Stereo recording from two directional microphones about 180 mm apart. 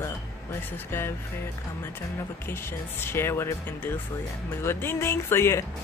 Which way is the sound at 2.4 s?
15° left (ahead or behind).